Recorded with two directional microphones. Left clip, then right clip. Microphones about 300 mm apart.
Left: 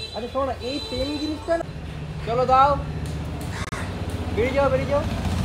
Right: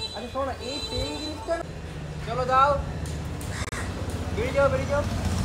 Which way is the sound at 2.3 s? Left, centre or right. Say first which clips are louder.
Left 4 dB; left.